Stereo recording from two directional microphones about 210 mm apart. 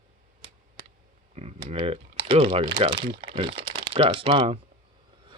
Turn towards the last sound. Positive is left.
turn(degrees=-25)  # may be behind; listen again after turning